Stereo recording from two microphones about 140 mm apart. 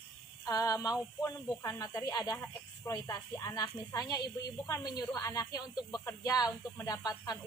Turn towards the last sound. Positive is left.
turn(degrees=30)  # may be behind; listen again after turning